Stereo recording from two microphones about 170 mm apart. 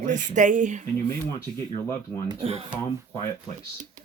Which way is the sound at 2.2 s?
35° right (ahead or behind).